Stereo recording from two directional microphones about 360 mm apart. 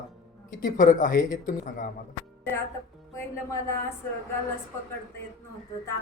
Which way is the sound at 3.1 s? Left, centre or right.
Centre.